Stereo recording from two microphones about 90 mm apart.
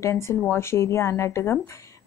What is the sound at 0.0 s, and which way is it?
Speech, 30° left (ahead or behind).